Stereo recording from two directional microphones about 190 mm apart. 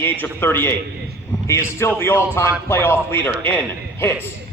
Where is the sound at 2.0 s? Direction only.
15° left (ahead or behind).